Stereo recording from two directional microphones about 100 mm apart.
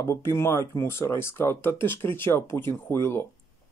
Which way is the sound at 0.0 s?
30° left (ahead or behind).